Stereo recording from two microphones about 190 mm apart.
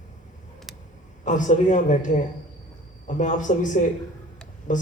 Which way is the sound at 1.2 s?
40° left (ahead or behind).